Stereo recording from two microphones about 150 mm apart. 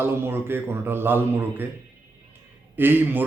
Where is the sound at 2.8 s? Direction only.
15° right (ahead or behind).